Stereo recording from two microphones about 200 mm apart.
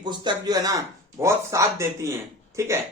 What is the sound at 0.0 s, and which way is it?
Speech, 20° right (ahead or behind).